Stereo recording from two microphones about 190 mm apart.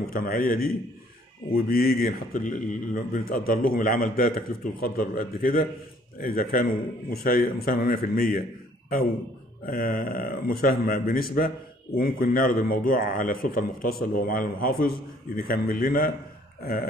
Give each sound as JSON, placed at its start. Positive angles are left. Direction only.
{"t": 0.1, "sound": "a man's voice", "side_deg": 50}
{"t": 9.7, "sound": "a man's voice", "side_deg": 50}